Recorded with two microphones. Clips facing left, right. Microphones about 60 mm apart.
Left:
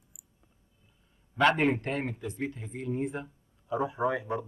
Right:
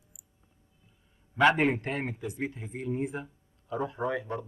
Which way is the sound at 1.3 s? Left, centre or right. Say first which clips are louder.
Right 1 dB; centre.